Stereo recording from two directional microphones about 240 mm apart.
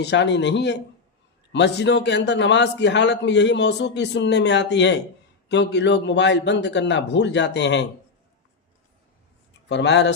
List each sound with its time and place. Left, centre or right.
0.0 s a man's voice: left
9.6 s a man's voice: left